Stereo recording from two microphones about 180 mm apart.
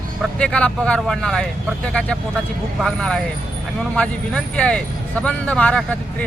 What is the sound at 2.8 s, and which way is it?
Speech, 5° left (ahead or behind).